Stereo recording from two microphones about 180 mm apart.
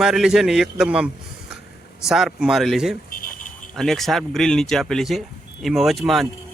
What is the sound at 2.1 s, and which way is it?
Speech, centre (ahead or behind).